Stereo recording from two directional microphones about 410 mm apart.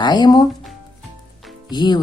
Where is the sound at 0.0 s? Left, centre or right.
Centre.